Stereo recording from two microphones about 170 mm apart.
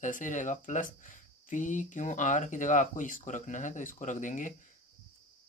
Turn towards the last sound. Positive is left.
turn(degrees=50)  # may be behind; listen again after turning